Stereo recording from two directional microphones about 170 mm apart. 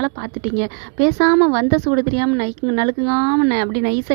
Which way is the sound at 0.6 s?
35° right (ahead or behind).